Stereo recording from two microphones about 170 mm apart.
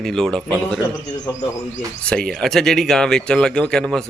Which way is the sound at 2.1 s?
5° left (ahead or behind).